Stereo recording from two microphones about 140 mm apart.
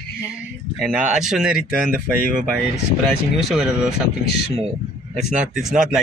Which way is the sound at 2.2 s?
90° right.